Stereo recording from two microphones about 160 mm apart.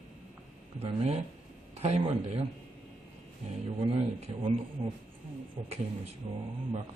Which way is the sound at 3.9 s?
35° right (ahead or behind).